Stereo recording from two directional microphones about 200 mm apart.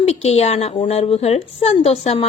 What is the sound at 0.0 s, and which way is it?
A woman's voice, 30° left (ahead or behind).